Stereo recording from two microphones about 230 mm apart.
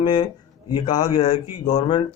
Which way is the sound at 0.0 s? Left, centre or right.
Centre.